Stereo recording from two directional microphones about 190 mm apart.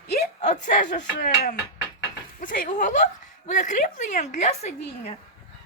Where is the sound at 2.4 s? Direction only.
45° left (ahead or behind).